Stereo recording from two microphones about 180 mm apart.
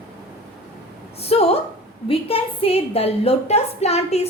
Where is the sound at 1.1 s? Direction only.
35° left (ahead or behind).